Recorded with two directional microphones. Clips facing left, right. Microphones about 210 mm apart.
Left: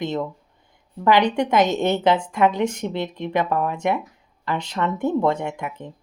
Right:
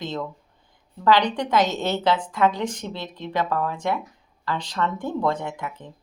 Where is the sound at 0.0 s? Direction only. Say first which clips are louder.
Left 5 dB; 20° left (ahead or behind).